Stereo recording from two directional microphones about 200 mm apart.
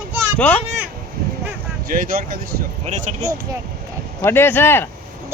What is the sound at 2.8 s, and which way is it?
Speech, 35° right (ahead or behind).